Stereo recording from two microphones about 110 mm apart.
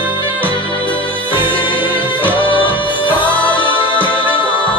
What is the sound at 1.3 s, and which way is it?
Music, 50° left (ahead or behind).